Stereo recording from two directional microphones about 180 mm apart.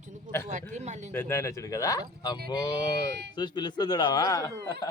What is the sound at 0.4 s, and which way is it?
Speech, 40° right (ahead or behind).